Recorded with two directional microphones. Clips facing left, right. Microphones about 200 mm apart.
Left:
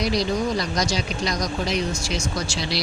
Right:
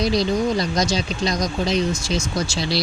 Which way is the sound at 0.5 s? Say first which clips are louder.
Right 3 dB; 25° right (ahead or behind).